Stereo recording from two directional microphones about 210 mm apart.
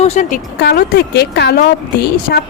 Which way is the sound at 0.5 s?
50° left (ahead or behind).